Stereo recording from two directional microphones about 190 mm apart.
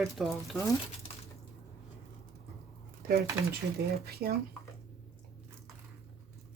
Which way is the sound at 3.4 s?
15° right (ahead or behind).